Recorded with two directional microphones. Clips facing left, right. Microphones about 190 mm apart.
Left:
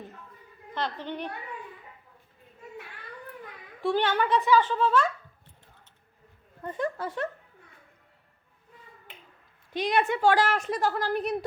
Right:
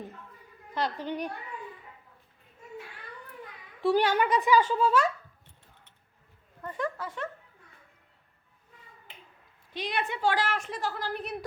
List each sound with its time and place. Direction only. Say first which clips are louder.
0.7 s speech: right 1 dB; 10° right (ahead or behind)
3.8 s speech: right 1 dB; 5° right (ahead or behind)
6.6 s speech: left 3 dB; 25° left (ahead or behind)
9.7 s a woman's voice: left 7 dB; 45° left (ahead or behind)